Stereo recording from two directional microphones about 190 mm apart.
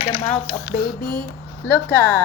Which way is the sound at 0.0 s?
35° left (ahead or behind).